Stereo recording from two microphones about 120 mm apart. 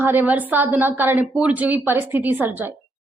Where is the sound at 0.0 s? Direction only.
15° right (ahead or behind).